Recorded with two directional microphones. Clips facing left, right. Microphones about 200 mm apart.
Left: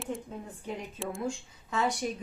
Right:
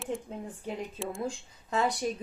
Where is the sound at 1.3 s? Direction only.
35° right (ahead or behind).